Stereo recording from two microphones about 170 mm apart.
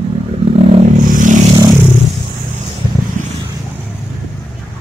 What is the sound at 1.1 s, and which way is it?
Vehicle, 50° right (ahead or behind).